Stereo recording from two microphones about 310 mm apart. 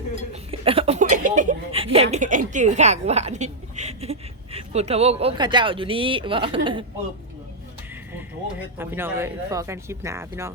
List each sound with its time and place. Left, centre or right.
0.6 s speech: centre
8.1 s speech: centre